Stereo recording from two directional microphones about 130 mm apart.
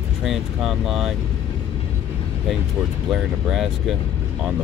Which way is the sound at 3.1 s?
5° right (ahead or behind).